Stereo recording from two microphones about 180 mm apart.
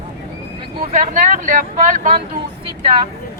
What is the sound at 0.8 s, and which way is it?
Speech, 45° right (ahead or behind).